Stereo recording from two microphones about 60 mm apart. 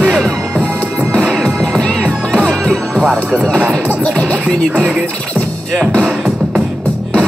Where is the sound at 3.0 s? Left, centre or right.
Centre.